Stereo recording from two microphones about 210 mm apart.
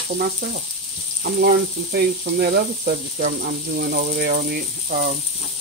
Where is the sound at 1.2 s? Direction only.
50° right (ahead or behind).